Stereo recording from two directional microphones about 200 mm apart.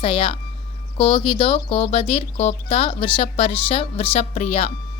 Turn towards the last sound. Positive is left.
turn(degrees=30)  # may be behind; listen again after turning